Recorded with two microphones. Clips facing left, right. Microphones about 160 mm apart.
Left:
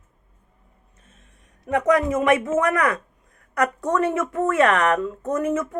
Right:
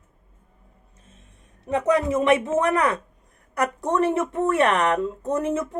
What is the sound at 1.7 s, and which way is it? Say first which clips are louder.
A woman's voice: left 1 dB; 30° right (ahead or behind).